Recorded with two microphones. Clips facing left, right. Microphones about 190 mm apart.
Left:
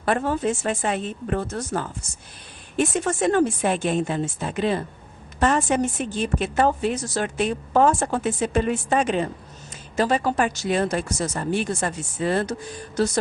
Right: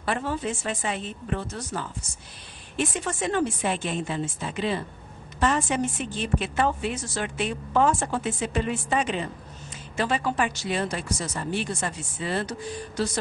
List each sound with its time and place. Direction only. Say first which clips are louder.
0.0 s a woman's voice: left 6 dB; 50° left (ahead or behind)